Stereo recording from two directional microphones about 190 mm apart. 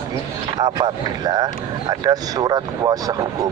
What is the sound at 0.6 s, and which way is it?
A man's voice, 20° right (ahead or behind).